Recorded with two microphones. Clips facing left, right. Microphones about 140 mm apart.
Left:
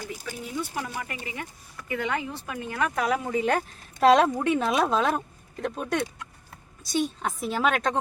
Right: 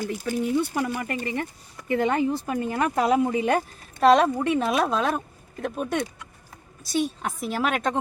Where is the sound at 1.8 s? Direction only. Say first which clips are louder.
Right 7 dB; 35° right (ahead or behind); by 3.6 s 15° right (ahead or behind).